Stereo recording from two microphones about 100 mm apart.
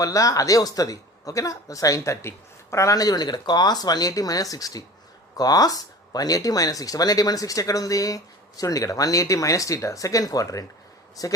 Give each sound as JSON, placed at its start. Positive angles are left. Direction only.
{"t": 0.0, "sound": "speech", "side_deg": 35}